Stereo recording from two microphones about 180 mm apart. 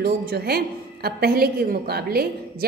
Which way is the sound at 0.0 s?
60° right (ahead or behind).